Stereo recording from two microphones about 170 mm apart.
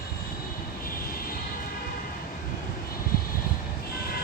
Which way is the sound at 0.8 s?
60° left (ahead or behind).